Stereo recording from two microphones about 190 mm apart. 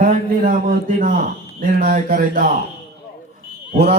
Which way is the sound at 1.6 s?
45° right (ahead or behind).